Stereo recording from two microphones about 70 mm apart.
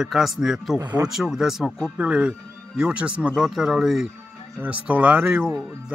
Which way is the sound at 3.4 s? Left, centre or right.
Centre.